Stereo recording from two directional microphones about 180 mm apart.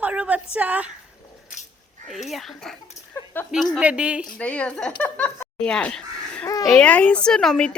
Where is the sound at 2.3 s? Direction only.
Centre (ahead or behind).